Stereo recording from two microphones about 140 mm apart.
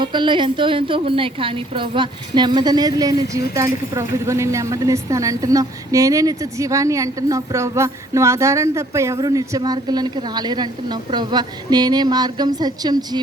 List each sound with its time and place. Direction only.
0.0 s a woman's voice: 35° right (ahead or behind)